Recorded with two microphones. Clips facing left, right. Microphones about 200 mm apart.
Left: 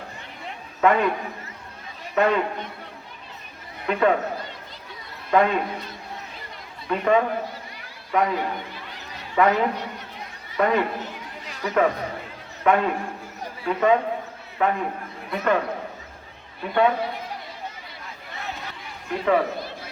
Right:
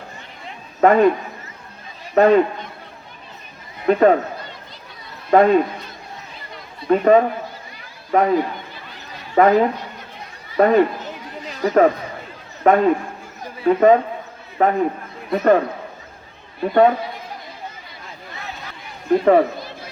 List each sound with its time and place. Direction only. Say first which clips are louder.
0.8 s a man's voice: right 6 dB; 40° right (ahead or behind)
2.1 s a man's voice: right 8 dB; 40° right (ahead or behind)
3.8 s a man's voice: right 7 dB; 40° right (ahead or behind)
5.3 s a man's voice: right 6 dB; 40° right (ahead or behind)
6.8 s a man's voice: right 7 dB; 40° right (ahead or behind)
9.3 s a woman's voice: right 6 dB; 40° right (ahead or behind)
16.6 s a man's voice: right 9 dB; 40° right (ahead or behind)
19.1 s a man's voice: right 8 dB; 40° right (ahead or behind)